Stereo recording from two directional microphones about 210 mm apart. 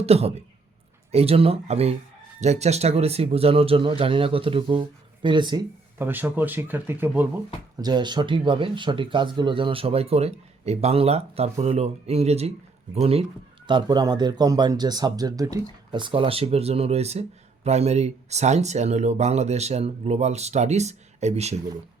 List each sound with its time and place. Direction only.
0.0 s speech: 30° right (ahead or behind)